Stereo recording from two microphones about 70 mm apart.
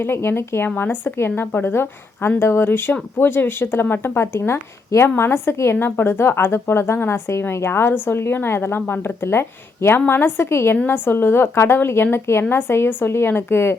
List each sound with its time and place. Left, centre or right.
0.0 s a woman's voice: left